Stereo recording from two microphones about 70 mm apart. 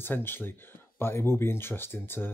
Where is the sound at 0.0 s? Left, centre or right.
Left.